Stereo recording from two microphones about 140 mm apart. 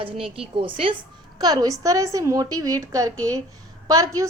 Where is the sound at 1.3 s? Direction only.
30° right (ahead or behind).